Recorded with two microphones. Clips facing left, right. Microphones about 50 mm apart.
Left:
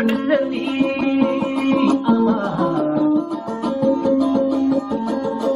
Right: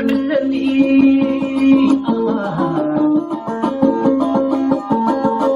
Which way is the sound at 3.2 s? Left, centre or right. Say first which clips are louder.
Right 3 dB; right.